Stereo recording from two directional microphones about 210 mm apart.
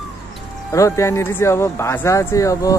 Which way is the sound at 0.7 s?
15° left (ahead or behind).